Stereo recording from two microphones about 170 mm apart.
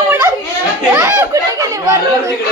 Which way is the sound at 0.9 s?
15° right (ahead or behind).